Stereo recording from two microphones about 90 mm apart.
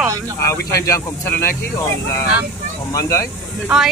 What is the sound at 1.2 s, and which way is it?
Speech, 25° left (ahead or behind).